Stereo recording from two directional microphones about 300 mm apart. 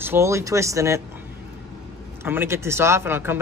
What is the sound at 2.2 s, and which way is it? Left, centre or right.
Speech, centre.